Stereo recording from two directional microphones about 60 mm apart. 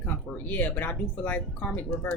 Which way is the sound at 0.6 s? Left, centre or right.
Left.